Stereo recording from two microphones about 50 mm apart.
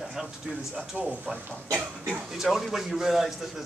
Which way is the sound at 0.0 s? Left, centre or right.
Centre.